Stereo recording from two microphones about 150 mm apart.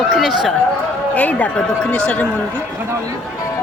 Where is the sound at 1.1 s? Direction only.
10° left (ahead or behind).